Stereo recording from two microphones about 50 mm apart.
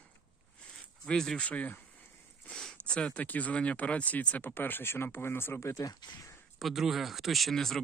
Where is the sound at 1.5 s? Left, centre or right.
Left.